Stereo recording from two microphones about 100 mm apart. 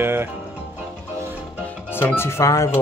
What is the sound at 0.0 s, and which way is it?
Music, 25° right (ahead or behind).